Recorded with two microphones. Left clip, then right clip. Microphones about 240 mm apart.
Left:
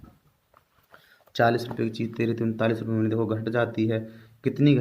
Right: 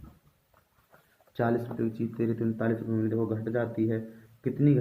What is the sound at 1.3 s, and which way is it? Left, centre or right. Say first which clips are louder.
Speech: left 7 dB; left.